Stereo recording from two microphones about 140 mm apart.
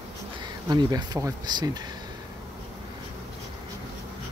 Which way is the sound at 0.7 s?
30° right (ahead or behind).